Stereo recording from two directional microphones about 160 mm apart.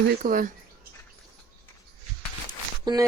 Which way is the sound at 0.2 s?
55° right (ahead or behind).